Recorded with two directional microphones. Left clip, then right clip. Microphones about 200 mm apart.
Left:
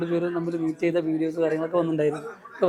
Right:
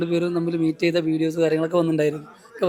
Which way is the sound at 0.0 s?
35° right (ahead or behind).